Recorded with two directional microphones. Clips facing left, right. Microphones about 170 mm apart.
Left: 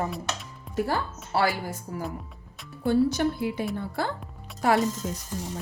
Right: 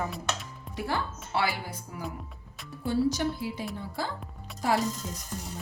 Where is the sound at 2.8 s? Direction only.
60° left (ahead or behind).